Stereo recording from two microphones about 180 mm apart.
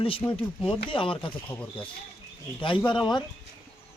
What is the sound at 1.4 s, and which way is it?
Speech, 10° left (ahead or behind).